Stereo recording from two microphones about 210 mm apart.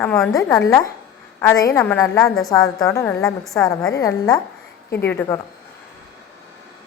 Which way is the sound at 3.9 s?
15° left (ahead or behind).